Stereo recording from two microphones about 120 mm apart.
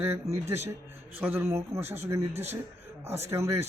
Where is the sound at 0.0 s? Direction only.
20° right (ahead or behind).